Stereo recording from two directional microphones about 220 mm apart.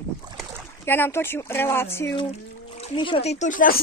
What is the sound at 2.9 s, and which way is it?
Speech, 25° left (ahead or behind).